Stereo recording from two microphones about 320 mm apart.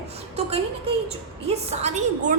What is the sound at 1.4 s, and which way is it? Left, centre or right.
Speech, centre.